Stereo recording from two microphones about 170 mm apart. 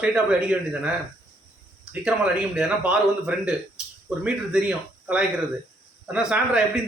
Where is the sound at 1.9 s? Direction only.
5° right (ahead or behind).